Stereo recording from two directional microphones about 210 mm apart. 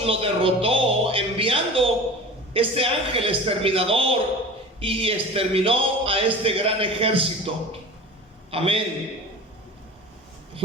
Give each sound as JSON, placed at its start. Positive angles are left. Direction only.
{"t": 0.0, "sound": "a man's voice", "side_deg": -25}